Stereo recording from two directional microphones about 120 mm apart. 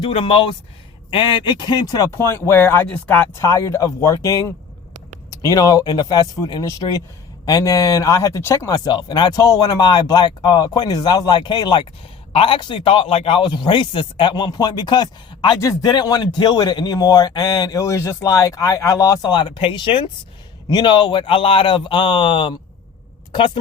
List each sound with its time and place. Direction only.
0.0 s a man's voice: 45° left (ahead or behind)
2.0 s speech: 20° left (ahead or behind); by 11.8 s 35° left (ahead or behind)
12.3 s a man's voice: 50° left (ahead or behind)